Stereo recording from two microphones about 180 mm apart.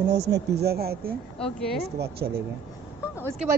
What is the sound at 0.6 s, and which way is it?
Speech, 60° right (ahead or behind).